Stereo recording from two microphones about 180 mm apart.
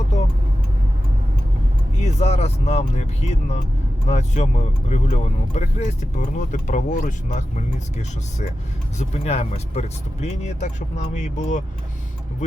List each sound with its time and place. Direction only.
2.0 s speech: 35° left (ahead or behind)